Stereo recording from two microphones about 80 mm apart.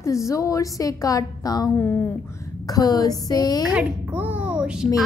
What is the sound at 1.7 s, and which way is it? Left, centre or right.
Speech, left.